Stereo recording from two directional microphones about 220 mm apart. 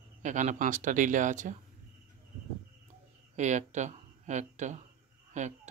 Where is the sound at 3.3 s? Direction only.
35° right (ahead or behind).